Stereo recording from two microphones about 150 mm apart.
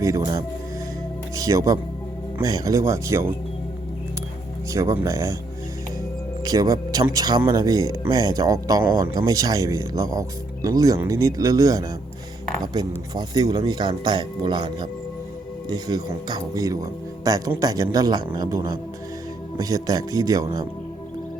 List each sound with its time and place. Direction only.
0.0 s speech: 20° right (ahead or behind)
4.7 s speech: 20° right (ahead or behind)
6.4 s speech: 25° right (ahead or behind)